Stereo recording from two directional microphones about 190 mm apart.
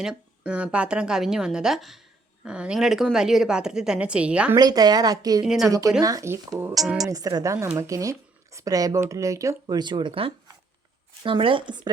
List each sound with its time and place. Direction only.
0.0 s a woman's voice: 5° right (ahead or behind)
4.5 s speech: 20° right (ahead or behind)
6.7 s a woman's voice: centre (ahead or behind)
7.1 s speech: 20° right (ahead or behind)